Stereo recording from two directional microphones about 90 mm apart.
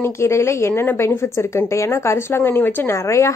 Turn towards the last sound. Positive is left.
turn(degrees=35)  # may be behind; listen again after turning